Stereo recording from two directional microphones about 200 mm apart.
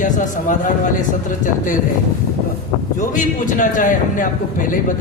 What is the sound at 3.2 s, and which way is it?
A man's voice, 40° left (ahead or behind).